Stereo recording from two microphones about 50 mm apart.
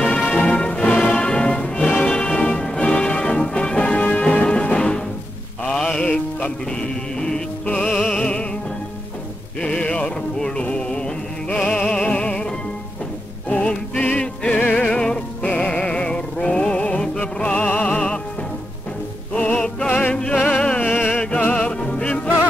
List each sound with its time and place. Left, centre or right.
0.0 s music: centre
9.6 s music: left
14.9 s music: centre
19.3 s music: left